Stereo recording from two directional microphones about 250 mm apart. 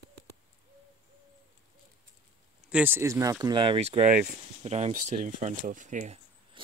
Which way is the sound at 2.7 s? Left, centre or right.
Centre.